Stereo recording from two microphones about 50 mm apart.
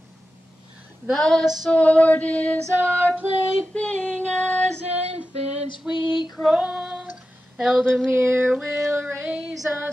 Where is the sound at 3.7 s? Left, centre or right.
Left.